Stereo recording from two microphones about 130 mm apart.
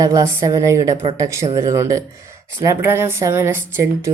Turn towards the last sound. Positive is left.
turn(degrees=-20)  # may be behind; listen again after turning